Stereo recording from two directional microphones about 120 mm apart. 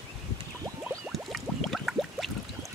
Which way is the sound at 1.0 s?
Centre (ahead or behind).